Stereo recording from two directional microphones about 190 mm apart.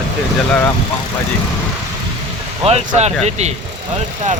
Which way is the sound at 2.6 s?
35° right (ahead or behind).